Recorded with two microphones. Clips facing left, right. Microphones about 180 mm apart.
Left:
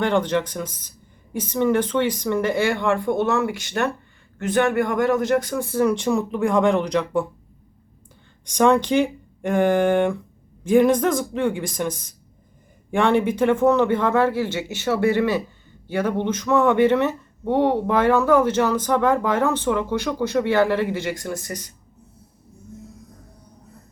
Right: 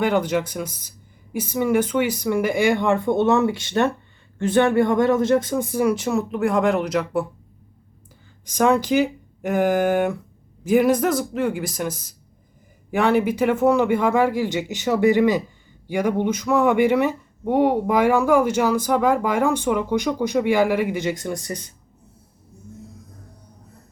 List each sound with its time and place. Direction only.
0.0 s speech: 10° right (ahead or behind)
8.4 s speech: 5° right (ahead or behind); by 21.7 s 20° right (ahead or behind)